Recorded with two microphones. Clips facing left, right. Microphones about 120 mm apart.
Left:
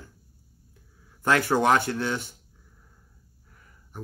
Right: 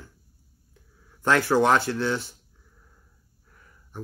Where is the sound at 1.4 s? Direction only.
15° left (ahead or behind).